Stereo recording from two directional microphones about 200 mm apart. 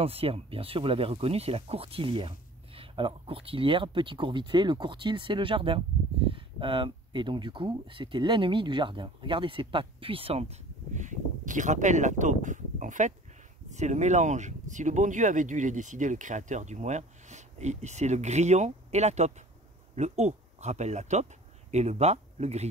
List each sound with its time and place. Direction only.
0.0 s speech: 30° right (ahead or behind)